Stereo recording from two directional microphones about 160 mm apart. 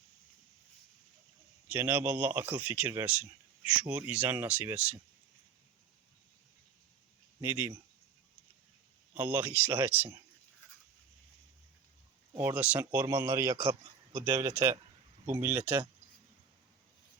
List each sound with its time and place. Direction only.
1.6 s speech: 10° right (ahead or behind)
7.4 s speech: 15° right (ahead or behind)
9.1 s speech: 10° right (ahead or behind)
12.3 s speech: 15° right (ahead or behind)